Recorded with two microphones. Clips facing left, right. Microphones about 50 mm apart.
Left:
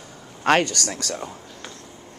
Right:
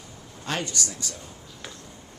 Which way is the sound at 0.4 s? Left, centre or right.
Left.